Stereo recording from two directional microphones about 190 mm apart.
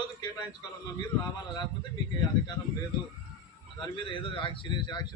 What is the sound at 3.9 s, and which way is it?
A man's voice, 25° left (ahead or behind).